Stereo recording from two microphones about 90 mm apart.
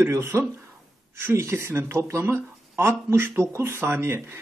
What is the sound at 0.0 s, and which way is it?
A man's voice, 30° right (ahead or behind).